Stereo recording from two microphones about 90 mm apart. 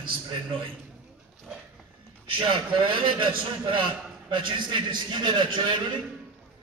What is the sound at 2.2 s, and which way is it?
A man's voice, 70° right (ahead or behind).